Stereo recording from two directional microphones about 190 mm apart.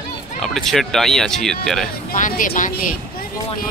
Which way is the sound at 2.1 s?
45° left (ahead or behind).